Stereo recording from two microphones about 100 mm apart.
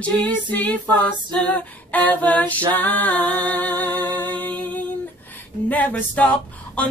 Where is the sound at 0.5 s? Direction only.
15° left (ahead or behind).